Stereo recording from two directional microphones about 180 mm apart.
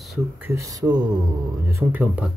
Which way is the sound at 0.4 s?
15° right (ahead or behind).